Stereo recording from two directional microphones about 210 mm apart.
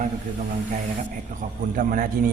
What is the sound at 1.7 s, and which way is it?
Speech, 40° right (ahead or behind).